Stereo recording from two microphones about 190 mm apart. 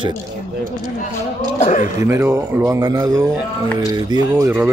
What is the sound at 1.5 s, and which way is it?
Speech, 40° left (ahead or behind).